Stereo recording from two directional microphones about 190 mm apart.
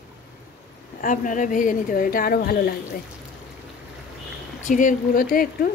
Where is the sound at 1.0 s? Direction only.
45° left (ahead or behind).